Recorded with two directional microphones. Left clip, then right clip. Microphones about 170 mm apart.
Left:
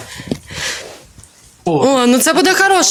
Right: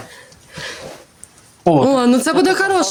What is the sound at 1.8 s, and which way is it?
Speech, 5° right (ahead or behind).